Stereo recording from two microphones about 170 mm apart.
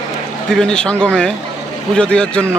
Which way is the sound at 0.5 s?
5° left (ahead or behind).